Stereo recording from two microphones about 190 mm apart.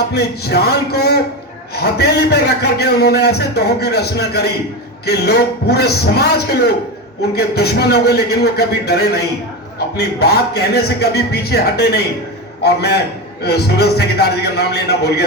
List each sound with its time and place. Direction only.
0.1 s a man's voice: 60° left (ahead or behind)